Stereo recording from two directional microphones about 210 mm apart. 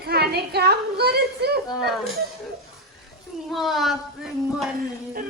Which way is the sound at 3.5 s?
Centre (ahead or behind).